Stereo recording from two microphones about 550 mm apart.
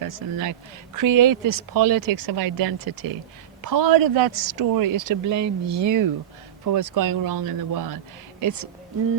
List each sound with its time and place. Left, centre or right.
0.0 s speech: right